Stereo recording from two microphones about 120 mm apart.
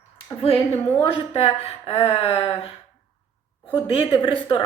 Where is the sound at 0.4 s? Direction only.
50° left (ahead or behind).